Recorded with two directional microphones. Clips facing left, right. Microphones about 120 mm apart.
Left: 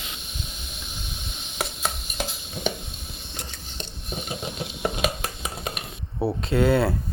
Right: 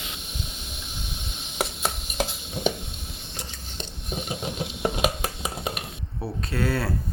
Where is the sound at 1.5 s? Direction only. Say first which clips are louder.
Right 1 dB; 25° right (ahead or behind).